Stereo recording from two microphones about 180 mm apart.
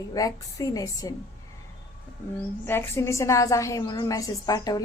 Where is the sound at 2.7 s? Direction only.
10° left (ahead or behind).